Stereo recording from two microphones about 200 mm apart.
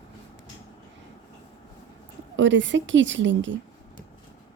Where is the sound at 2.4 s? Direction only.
65° right (ahead or behind).